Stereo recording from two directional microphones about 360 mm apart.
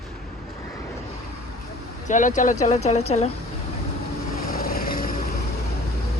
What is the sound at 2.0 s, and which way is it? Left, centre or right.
Speech, left.